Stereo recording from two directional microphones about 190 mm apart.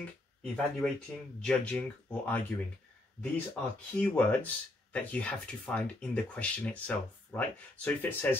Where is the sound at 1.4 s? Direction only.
5° left (ahead or behind).